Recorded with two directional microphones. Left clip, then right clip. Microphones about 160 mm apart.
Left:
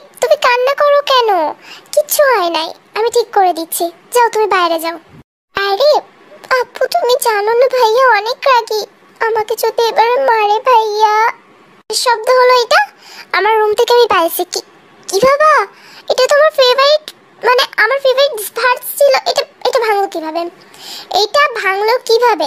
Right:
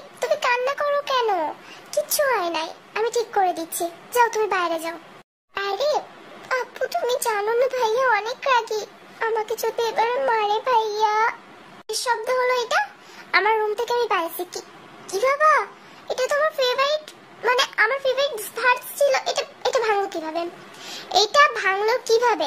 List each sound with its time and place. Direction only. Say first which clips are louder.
0.2 s a child's voice: left 11 dB; 40° left (ahead or behind)